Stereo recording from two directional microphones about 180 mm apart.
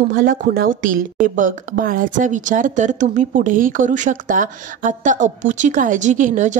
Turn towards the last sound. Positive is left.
turn(degrees=-45)  # may be behind; listen again after turning